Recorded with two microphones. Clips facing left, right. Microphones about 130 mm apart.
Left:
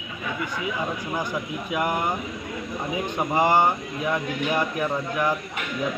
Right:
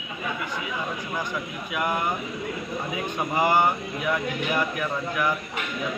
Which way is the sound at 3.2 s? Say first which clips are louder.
Left 2 dB; 25° left (ahead or behind).